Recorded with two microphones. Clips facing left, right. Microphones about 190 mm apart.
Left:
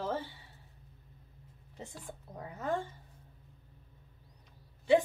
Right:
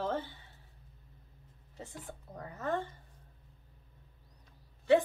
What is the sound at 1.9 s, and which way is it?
Speech, 10° left (ahead or behind).